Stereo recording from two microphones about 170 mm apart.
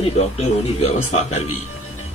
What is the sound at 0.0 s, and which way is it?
Speech, 35° left (ahead or behind).